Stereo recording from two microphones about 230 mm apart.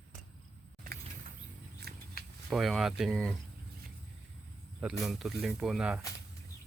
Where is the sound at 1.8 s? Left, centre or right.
Right.